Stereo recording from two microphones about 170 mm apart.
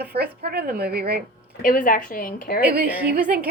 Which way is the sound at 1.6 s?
55° left (ahead or behind).